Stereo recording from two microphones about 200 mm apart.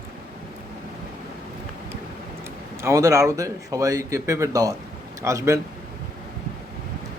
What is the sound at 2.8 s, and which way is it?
Speech, 15° right (ahead or behind).